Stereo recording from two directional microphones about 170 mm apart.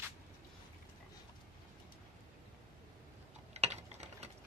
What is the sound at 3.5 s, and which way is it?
Typing, 40° right (ahead or behind).